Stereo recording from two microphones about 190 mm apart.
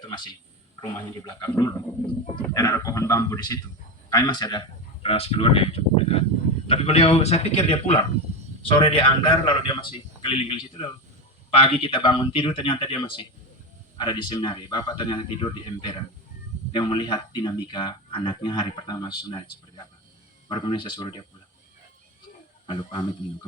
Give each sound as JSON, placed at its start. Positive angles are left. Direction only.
{"t": 0.8, "sound": "a man's voice", "side_deg": 20}
{"t": 22.6, "sound": "speech", "side_deg": 30}